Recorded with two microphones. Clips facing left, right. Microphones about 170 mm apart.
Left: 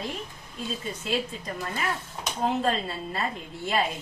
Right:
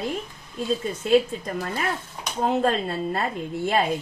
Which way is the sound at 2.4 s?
50° right (ahead or behind).